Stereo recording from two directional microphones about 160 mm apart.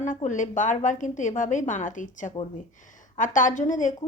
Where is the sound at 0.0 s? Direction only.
50° left (ahead or behind).